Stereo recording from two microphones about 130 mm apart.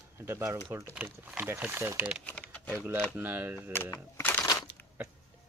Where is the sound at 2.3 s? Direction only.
10° left (ahead or behind).